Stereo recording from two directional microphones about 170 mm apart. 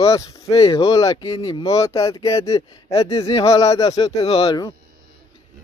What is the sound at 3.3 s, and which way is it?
Speech, 20° left (ahead or behind).